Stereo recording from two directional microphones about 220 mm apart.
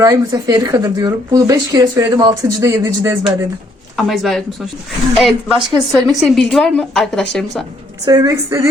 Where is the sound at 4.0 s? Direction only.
Centre (ahead or behind).